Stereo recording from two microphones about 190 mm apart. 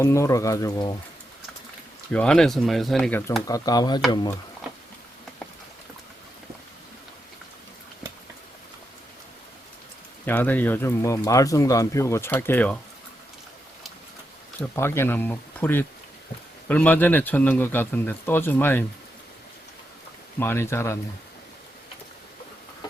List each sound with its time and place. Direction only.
0.0 s speech: 15° left (ahead or behind)
2.1 s speech: 5° left (ahead or behind); by 4.4 s 20° left (ahead or behind)
10.2 s speech: 10° left (ahead or behind)
14.6 s speech: 10° left (ahead or behind)
20.4 s speech: 10° left (ahead or behind)